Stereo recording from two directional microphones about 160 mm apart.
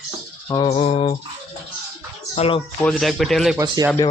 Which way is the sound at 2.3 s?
40° left (ahead or behind).